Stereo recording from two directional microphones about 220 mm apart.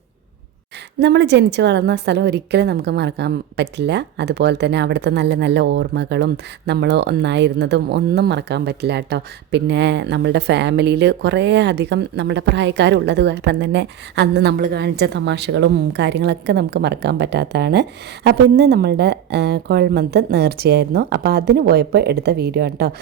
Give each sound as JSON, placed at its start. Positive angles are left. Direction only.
{"t": 0.9, "sound": "a woman's voice", "side_deg": -50}